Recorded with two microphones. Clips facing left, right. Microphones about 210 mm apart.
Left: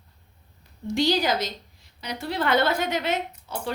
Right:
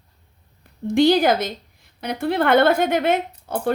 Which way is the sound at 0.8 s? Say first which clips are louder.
Right 7 dB; 55° right (ahead or behind).